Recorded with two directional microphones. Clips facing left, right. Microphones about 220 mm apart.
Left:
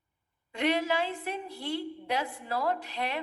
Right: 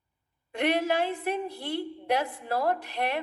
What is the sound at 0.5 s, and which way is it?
A woman's voice, 55° right (ahead or behind).